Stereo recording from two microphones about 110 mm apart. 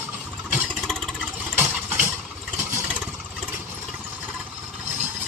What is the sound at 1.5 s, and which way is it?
Vehicle, 20° right (ahead or behind).